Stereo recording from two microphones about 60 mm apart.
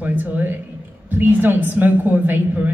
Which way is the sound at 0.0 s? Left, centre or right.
Right.